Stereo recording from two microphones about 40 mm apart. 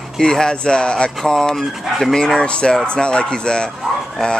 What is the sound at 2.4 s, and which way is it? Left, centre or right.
Speech, left.